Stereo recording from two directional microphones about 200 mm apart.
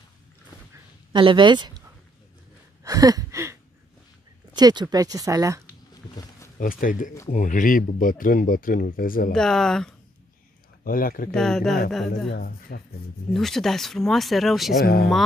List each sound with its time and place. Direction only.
1.1 s speech: 25° right (ahead or behind)
2.8 s a sound: 15° right (ahead or behind)
4.6 s speech: 20° right (ahead or behind)
6.6 s speech: 45° left (ahead or behind)
9.3 s speech: centre (ahead or behind)
10.8 s speech: 45° left (ahead or behind)
11.3 s speech: centre (ahead or behind)
12.3 s speech: 50° left (ahead or behind)
13.3 s speech: centre (ahead or behind)